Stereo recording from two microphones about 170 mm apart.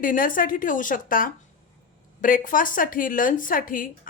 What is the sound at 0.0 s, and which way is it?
A woman's voice, 55° left (ahead or behind).